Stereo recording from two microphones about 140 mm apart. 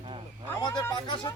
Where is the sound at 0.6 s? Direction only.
30° left (ahead or behind).